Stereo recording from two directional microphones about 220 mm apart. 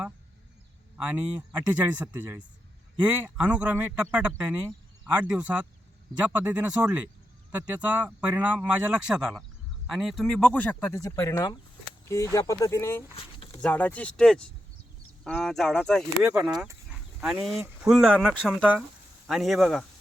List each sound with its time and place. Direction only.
1.0 s speech: 5° right (ahead or behind); by 13.1 s 10° left (ahead or behind)
13.1 s a sound: 25° left (ahead or behind)
13.6 s speech: 5° left (ahead or behind)
16.6 s livestock: 5° right (ahead or behind)
17.6 s speech: 5° right (ahead or behind)